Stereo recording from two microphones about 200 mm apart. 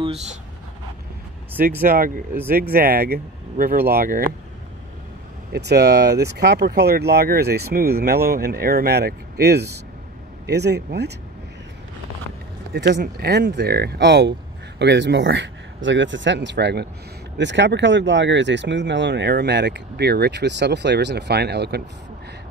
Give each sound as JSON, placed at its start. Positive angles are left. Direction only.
{"t": 1.9, "sound": "speech", "side_deg": -45}
{"t": 5.5, "sound": "speech", "side_deg": -55}
{"t": 12.7, "sound": "speech", "side_deg": -60}